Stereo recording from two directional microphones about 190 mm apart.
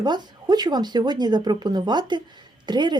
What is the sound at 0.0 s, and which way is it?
A woman's voice, 20° right (ahead or behind).